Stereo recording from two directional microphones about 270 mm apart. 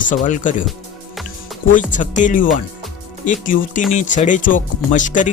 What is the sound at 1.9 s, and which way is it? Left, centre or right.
Speech, left.